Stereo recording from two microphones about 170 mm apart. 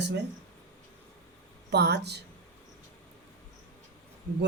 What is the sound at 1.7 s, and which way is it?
Speech, 80° right.